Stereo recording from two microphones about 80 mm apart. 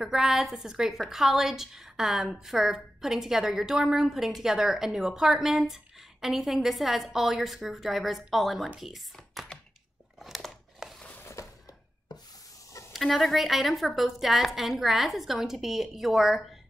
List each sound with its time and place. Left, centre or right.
0.0 s a woman's voice: centre
10.1 s crumpling: centre
11.4 s a sound: left
12.9 s a woman's voice: centre